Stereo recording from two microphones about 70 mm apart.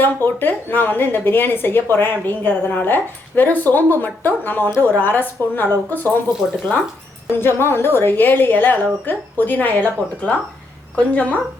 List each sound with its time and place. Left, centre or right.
0.3 s a woman's voice: left
7.3 s a woman's voice: left; by 11.3 s centre